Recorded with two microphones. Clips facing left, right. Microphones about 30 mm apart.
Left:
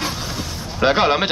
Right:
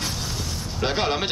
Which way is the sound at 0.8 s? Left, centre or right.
Left.